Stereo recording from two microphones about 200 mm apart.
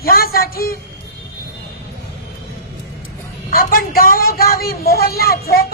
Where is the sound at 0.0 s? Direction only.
50° left (ahead or behind).